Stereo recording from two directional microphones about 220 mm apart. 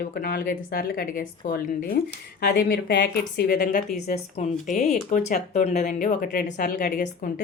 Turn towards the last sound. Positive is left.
turn(degrees=40)  # may be behind; listen again after turning